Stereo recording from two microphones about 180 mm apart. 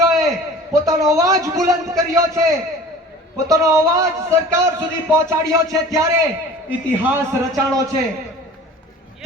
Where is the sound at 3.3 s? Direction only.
20° right (ahead or behind).